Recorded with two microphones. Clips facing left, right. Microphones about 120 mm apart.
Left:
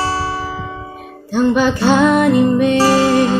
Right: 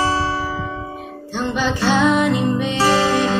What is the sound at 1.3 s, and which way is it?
Music, 45° left (ahead or behind).